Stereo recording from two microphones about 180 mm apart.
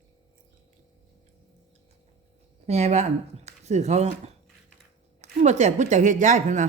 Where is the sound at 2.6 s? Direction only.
40° right (ahead or behind).